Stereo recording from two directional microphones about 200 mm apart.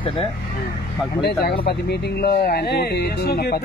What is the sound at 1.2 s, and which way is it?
Speech, 55° left (ahead or behind).